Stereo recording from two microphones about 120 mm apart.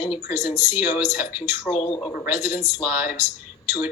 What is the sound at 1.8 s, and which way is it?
Speech, 40° left (ahead or behind).